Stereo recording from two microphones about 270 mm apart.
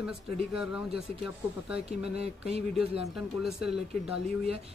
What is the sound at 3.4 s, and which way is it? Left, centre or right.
Speech, centre.